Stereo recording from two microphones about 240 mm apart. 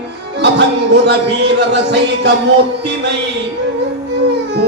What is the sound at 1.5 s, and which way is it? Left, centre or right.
Music, right.